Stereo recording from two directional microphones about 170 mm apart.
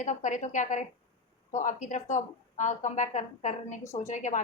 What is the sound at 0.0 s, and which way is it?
A woman's voice, 45° left (ahead or behind).